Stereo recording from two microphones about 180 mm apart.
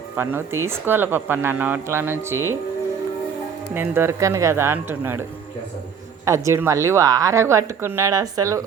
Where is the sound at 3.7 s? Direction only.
10° right (ahead or behind).